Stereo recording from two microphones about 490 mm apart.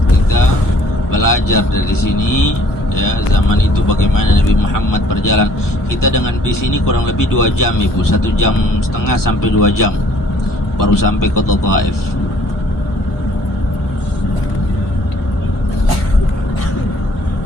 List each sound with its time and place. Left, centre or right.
1.1 s speech: left
3.8 s speech: left